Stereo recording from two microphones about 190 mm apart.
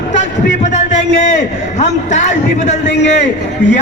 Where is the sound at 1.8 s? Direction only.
40° left (ahead or behind).